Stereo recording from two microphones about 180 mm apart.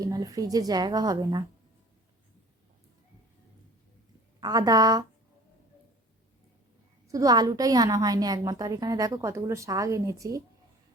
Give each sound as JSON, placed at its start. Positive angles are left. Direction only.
{"t": 0.0, "sound": "a woman's voice", "side_deg": -20}
{"t": 4.4, "sound": "a woman's voice", "side_deg": -20}
{"t": 7.1, "sound": "a woman's voice", "side_deg": -20}